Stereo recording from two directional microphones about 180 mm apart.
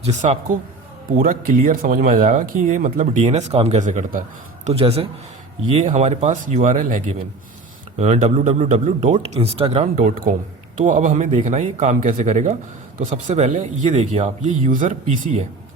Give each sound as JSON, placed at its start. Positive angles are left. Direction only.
{"t": 0.0, "sound": "speech", "side_deg": -40}
{"t": 4.6, "sound": "speech", "side_deg": -35}